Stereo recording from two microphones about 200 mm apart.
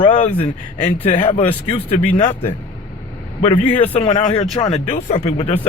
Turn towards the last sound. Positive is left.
turn(degrees=30)  # may be behind; listen again after turning